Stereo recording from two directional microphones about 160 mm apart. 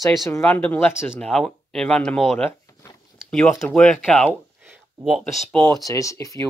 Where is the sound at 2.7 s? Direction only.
20° left (ahead or behind).